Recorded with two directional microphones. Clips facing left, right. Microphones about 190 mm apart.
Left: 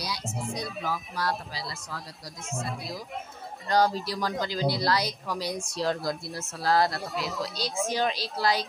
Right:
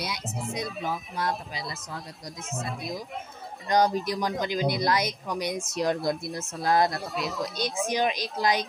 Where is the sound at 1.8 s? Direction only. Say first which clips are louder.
Right 1 dB; centre (ahead or behind).